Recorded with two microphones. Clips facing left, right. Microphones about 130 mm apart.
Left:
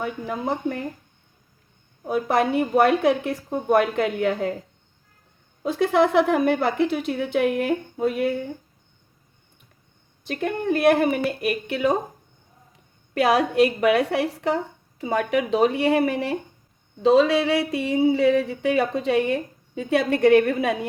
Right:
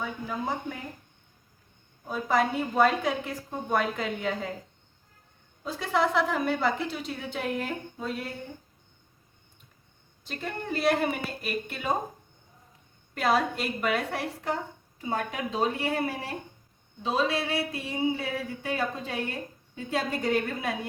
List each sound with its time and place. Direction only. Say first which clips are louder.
0.0 s speech: left 5 dB; 65° left (ahead or behind)
2.0 s speech: left 5 dB; 65° left (ahead or behind)
5.6 s speech: left 8 dB; 60° left (ahead or behind)
10.2 s speech: left 10 dB; 60° left (ahead or behind)
11.0 s a sound: left 8 dB; 65° left (ahead or behind)
13.1 s a sound: left 8 dB; 75° left (ahead or behind)